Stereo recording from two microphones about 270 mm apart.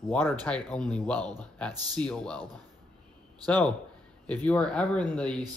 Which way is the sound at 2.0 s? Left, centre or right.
Centre.